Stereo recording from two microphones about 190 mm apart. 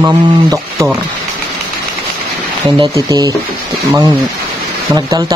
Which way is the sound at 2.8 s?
20° right (ahead or behind).